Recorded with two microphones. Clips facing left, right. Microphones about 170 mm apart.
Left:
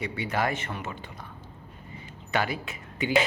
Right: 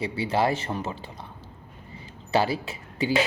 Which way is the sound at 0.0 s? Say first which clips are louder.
Right 4 dB; 30° right (ahead or behind).